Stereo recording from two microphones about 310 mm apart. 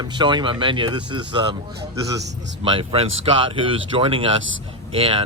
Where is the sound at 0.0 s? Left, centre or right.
Centre.